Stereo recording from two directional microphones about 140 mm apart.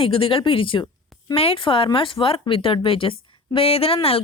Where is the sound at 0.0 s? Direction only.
40° left (ahead or behind).